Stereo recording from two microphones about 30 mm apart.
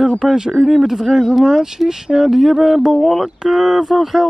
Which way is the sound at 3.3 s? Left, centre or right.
Centre.